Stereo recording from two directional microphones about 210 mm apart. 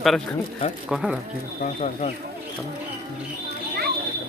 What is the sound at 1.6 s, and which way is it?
Speech, 30° left (ahead or behind).